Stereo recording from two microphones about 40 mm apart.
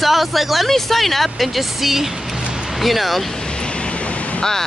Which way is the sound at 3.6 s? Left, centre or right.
Left.